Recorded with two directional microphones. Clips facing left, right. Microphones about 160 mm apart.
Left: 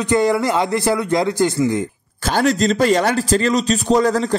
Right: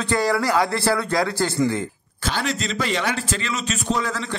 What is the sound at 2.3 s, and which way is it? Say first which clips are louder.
Speech: left 9 dB; 45° left (ahead or behind).